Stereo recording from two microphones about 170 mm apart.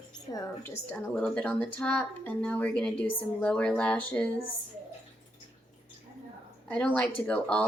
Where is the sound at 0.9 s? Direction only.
5° left (ahead or behind).